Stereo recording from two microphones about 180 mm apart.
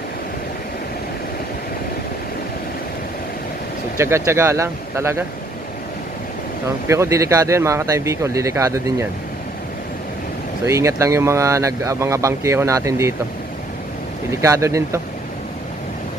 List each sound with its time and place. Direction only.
3.9 s speech: 15° right (ahead or behind)
6.7 s speech: 15° right (ahead or behind)
10.7 s speech: 15° right (ahead or behind)
14.3 s speech: 15° right (ahead or behind)